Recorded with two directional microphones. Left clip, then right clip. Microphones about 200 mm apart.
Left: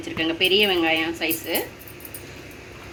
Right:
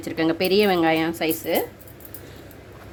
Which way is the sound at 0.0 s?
65° right (ahead or behind).